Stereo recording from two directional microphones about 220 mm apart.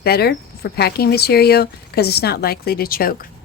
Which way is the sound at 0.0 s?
45° left (ahead or behind).